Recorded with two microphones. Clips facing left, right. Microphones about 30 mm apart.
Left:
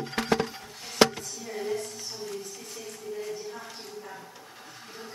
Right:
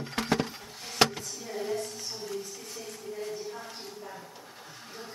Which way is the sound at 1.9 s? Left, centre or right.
Centre.